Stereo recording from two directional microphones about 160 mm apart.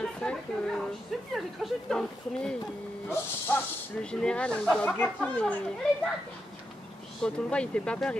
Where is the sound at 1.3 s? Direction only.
Centre (ahead or behind).